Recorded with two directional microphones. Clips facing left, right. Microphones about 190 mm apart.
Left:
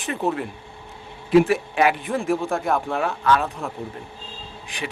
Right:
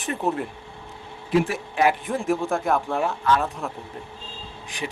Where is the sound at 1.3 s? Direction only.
80° left.